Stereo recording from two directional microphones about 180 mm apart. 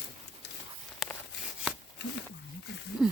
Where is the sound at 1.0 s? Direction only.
Centre (ahead or behind).